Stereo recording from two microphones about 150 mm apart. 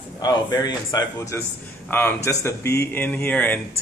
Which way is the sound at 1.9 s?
10° left (ahead or behind).